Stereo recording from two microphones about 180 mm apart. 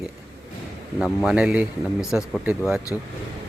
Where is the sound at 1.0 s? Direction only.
5° right (ahead or behind).